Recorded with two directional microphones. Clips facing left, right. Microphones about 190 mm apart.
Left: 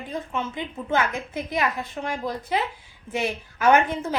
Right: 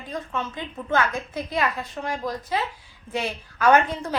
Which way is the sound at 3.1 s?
15° left (ahead or behind).